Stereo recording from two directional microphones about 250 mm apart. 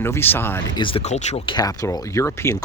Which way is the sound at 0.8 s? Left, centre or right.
Left.